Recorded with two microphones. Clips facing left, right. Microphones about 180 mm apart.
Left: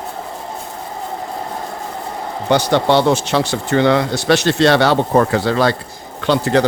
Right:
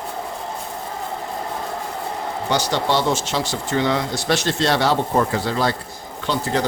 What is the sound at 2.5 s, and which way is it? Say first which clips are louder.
Speech: left 7 dB; 55° left (ahead or behind).